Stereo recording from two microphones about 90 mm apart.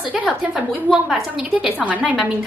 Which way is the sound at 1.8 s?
15° right (ahead or behind).